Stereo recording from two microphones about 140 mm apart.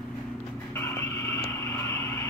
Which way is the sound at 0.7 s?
20° left (ahead or behind).